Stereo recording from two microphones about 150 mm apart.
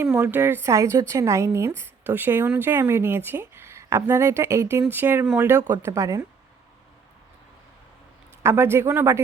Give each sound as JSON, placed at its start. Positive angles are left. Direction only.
{"t": 0.0, "sound": "a woman's voice", "side_deg": -10}
{"t": 8.4, "sound": "a woman's voice", "side_deg": -15}